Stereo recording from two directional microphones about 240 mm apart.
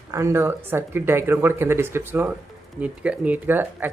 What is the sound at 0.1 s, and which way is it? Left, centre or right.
Speech, centre.